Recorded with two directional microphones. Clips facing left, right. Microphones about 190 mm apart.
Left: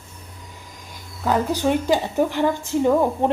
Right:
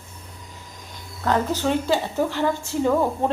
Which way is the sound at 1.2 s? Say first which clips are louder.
Left 2 dB; 10° left (ahead or behind).